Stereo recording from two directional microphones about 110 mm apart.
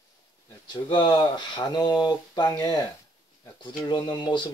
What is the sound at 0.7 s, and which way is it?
Speech, 45° left (ahead or behind).